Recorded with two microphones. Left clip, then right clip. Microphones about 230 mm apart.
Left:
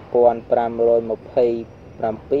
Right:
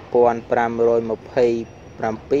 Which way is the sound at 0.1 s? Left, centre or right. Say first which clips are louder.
Left 1 dB; right.